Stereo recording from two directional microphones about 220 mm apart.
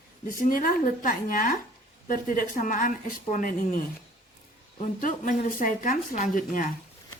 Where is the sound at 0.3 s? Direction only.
40° left (ahead or behind).